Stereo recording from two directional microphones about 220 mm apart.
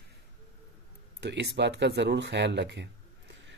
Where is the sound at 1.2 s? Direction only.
50° right (ahead or behind).